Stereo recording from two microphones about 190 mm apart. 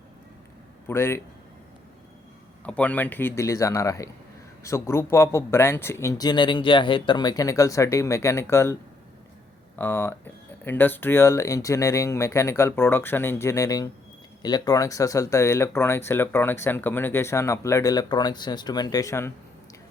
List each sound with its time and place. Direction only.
0.9 s speech: 10° left (ahead or behind)
2.6 s speech: 5° left (ahead or behind)